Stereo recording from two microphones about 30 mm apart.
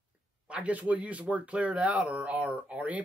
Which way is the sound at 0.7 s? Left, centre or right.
Right.